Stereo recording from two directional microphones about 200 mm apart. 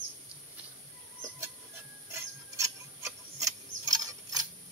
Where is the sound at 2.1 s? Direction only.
15° right (ahead or behind).